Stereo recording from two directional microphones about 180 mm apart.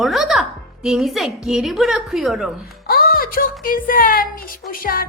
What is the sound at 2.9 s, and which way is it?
Speech, 55° left (ahead or behind).